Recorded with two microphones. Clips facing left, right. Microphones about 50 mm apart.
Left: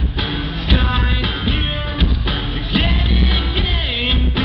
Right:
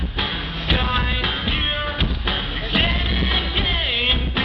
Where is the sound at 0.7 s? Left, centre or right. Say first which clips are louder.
Left 1 dB; centre.